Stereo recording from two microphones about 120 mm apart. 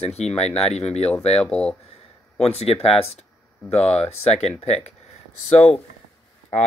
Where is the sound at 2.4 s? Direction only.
55° left (ahead or behind).